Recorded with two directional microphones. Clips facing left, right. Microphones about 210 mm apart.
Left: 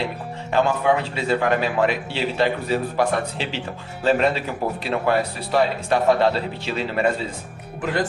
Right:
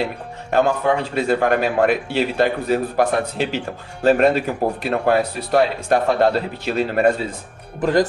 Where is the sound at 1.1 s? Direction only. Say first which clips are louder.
Right 3 dB; 50° right (ahead or behind).